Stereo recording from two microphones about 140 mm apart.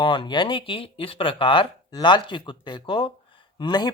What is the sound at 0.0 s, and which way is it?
Speech, 35° left (ahead or behind).